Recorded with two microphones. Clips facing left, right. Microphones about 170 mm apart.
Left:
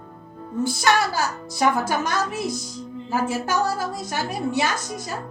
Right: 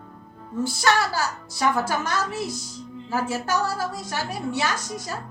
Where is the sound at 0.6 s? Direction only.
15° left (ahead or behind).